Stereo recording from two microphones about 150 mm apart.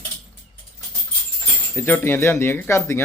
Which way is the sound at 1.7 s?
15° left (ahead or behind).